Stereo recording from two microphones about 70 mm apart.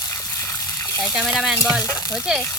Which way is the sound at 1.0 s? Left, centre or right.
Centre.